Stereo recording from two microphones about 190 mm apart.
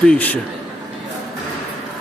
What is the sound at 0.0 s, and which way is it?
Speech, 5° left (ahead or behind).